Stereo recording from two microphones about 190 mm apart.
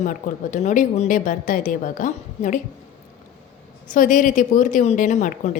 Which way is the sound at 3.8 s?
45° left (ahead or behind).